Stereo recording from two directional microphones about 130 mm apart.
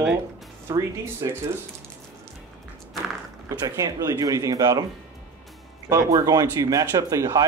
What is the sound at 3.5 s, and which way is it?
Speech, 25° right (ahead or behind).